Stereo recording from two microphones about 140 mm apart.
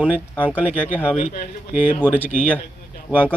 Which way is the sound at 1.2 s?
70° left (ahead or behind).